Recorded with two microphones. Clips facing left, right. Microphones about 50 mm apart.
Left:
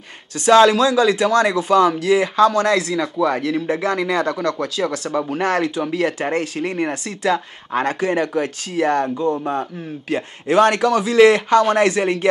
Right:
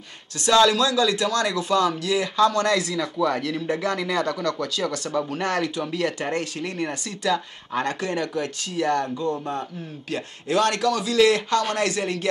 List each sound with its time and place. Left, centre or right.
0.4 s speech: left